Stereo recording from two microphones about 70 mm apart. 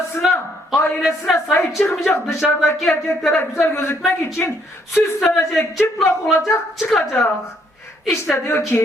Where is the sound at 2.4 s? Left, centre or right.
Centre.